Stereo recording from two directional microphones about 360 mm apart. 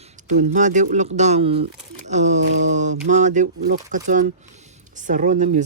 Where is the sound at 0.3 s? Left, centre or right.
Centre.